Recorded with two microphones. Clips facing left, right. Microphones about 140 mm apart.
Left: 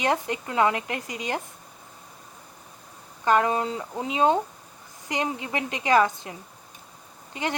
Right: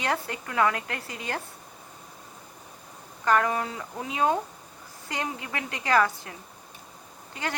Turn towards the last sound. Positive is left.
turn(degrees=20)  # may be behind; listen again after turning